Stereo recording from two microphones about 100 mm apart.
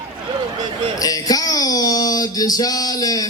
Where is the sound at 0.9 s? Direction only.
35° left (ahead or behind).